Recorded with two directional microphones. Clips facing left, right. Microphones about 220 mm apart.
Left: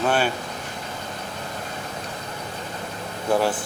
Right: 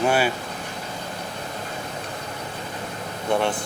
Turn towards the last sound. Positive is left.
turn(degrees=5)  # may be behind; listen again after turning